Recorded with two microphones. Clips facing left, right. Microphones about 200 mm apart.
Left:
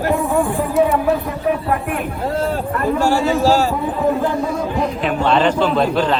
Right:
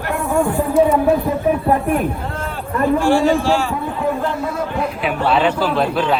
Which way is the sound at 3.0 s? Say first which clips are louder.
Left 1 dB; 40° left (ahead or behind).